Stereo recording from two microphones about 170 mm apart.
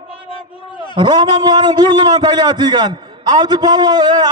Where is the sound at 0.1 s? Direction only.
30° left (ahead or behind).